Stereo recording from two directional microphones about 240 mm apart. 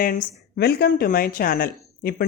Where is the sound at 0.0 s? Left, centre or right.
Left.